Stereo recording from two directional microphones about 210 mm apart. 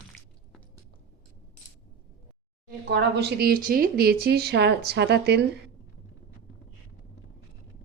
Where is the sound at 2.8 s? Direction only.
55° right (ahead or behind).